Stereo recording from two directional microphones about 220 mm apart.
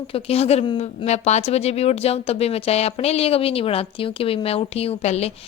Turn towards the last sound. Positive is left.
turn(degrees=30)  # may be behind; listen again after turning